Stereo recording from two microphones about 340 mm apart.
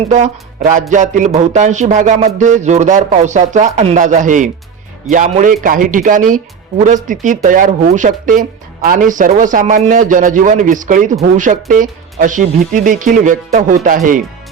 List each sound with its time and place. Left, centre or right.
0.1 s speech: right